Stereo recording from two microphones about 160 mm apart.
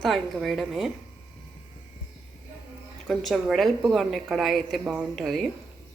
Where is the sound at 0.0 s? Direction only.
Centre (ahead or behind).